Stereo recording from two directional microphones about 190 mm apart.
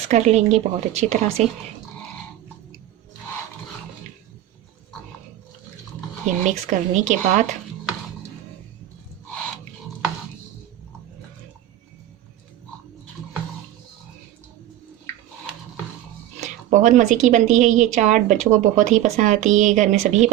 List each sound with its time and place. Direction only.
0.1 s speech: 35° right (ahead or behind)
6.2 s speech: 40° right (ahead or behind)
16.4 s speech: 40° right (ahead or behind)